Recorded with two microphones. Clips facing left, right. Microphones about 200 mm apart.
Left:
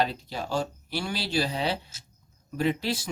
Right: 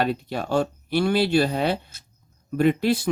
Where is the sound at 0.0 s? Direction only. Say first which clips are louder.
Right 4 dB; 60° right (ahead or behind).